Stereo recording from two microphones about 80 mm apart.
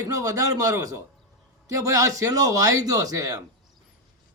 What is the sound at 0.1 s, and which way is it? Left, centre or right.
Speech, right.